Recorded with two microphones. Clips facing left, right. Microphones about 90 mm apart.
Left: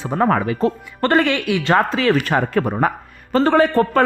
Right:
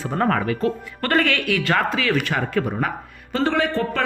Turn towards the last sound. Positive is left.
turn(degrees=40)  # may be behind; listen again after turning